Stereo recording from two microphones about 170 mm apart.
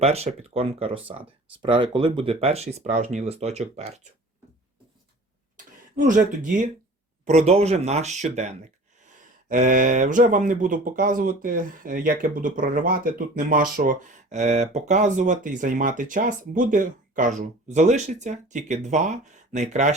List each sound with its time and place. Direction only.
0.0 s speech: 40° right (ahead or behind)
6.0 s speech: 50° right (ahead or behind)
7.3 s speech: 40° right (ahead or behind)